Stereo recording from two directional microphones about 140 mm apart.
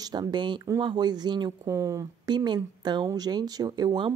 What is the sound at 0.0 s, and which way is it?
Speech, 30° right (ahead or behind).